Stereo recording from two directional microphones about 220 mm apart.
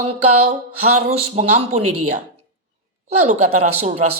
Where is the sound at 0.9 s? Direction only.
30° right (ahead or behind).